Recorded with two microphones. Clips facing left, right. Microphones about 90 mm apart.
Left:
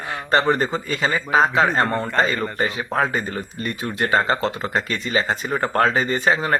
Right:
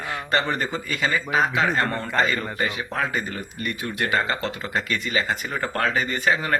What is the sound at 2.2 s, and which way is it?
Speech, 30° left (ahead or behind).